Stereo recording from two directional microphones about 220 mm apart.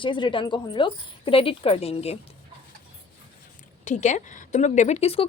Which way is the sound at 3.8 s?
35° left (ahead or behind).